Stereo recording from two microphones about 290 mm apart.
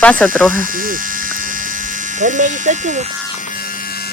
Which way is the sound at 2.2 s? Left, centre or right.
Right.